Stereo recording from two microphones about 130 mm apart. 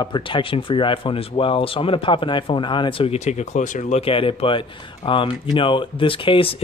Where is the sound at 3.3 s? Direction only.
65° left (ahead or behind).